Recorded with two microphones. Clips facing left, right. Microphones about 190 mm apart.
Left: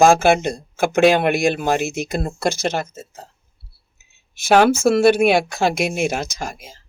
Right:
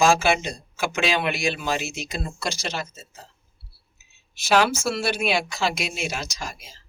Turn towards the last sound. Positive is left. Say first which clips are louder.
# left 6 dB
turn(degrees=50)  # may be behind; listen again after turning